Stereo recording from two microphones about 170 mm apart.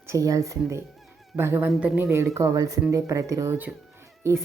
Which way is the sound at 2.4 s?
20° right (ahead or behind).